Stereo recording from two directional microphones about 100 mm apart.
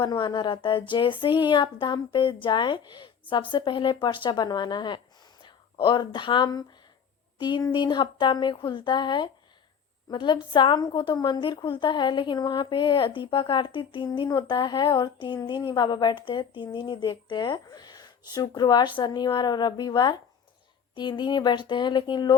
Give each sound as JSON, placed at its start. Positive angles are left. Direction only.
{"t": 0.0, "sound": "a woman's voice", "side_deg": 45}